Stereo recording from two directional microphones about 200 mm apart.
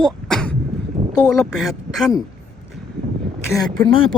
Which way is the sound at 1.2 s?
Centre (ahead or behind).